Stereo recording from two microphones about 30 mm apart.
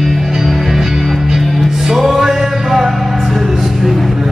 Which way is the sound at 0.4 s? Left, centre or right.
Centre.